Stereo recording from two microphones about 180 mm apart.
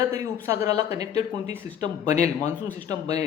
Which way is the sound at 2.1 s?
40° left (ahead or behind).